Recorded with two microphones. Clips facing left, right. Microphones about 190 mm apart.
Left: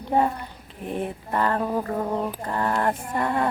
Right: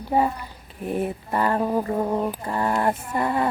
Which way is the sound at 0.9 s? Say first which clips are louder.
Right 3 dB; 5° right (ahead or behind).